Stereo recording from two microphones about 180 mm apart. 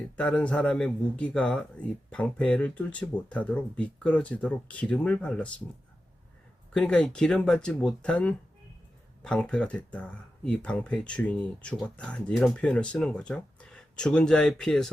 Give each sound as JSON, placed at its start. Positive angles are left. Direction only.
{"t": 0.2, "sound": "speech", "side_deg": 5}
{"t": 6.7, "sound": "speech", "side_deg": 5}